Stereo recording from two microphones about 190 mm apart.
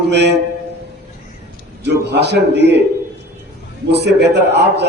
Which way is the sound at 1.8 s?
65° right (ahead or behind).